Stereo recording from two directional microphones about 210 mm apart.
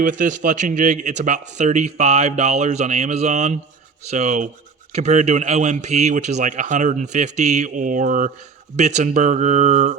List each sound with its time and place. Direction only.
0.0 s a man's voice: 40° right (ahead or behind)